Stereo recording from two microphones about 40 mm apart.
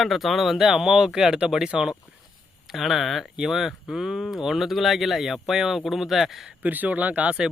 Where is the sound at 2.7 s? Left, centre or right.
Centre.